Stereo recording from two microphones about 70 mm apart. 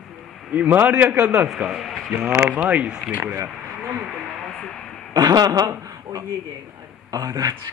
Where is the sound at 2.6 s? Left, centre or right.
Centre.